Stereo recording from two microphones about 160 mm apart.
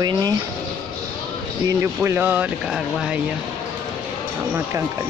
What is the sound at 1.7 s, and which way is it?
Speech, 15° right (ahead or behind).